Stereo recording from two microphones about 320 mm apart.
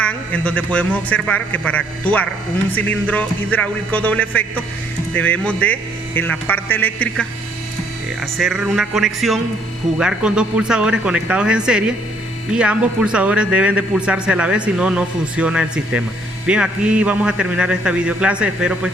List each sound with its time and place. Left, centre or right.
0.0 s speech: centre